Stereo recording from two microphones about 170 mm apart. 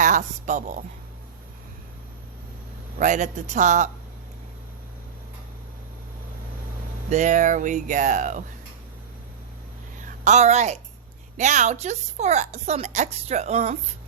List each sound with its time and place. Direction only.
0.0 s speech: 45° right (ahead or behind)
3.0 s speech: 45° right (ahead or behind)
7.1 s speech: 45° right (ahead or behind)
10.2 s a woman's voice: 45° right (ahead or behind)